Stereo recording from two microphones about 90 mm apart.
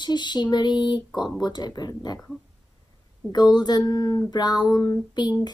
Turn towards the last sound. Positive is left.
turn(degrees=50)  # may be behind; listen again after turning